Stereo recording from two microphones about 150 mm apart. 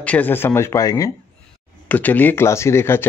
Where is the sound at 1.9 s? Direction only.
10° left (ahead or behind).